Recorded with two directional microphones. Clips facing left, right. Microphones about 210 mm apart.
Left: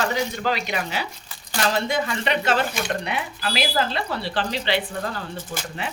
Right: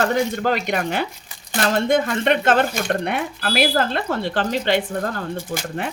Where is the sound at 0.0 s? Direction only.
55° right (ahead or behind).